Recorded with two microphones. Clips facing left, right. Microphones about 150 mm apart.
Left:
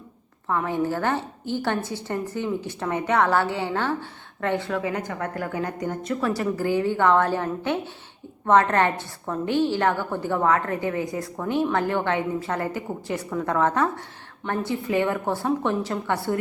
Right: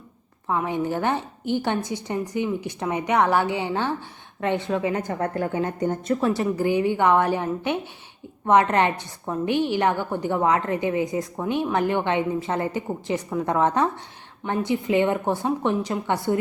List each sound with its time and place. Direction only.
0.4 s a woman's voice: 15° right (ahead or behind)